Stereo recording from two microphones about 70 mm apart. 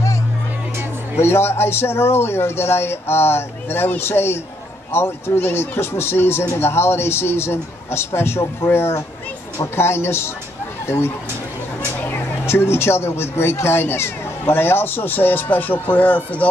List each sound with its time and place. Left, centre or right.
1.2 s speech: left
12.0 s speech: left